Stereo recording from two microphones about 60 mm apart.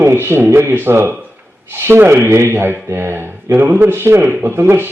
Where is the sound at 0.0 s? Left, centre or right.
Right.